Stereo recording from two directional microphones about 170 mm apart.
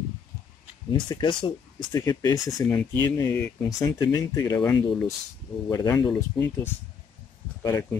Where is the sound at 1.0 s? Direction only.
30° left (ahead or behind).